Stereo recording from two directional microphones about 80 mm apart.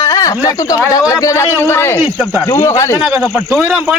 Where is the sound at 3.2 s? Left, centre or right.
Centre.